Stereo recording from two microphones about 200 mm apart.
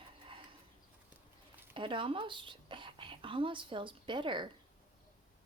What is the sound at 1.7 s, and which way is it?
Speech, 25° right (ahead or behind).